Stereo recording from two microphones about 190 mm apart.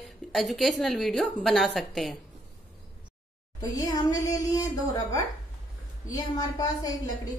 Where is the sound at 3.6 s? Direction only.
20° left (ahead or behind).